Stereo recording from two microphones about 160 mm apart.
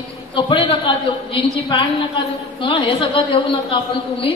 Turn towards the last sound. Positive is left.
turn(degrees=35)  # may be behind; listen again after turning